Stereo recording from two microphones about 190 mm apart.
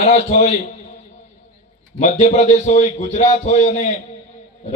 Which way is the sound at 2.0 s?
40° left (ahead or behind).